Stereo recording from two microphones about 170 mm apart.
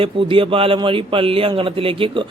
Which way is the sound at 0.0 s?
30° right (ahead or behind).